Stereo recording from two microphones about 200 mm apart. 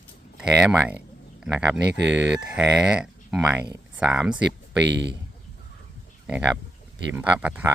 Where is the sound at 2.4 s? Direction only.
5° right (ahead or behind).